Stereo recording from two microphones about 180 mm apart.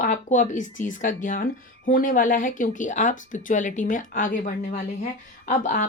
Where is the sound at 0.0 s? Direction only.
45° left (ahead or behind).